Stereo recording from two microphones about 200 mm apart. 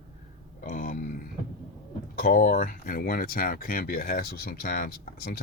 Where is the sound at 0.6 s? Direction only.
45° left (ahead or behind).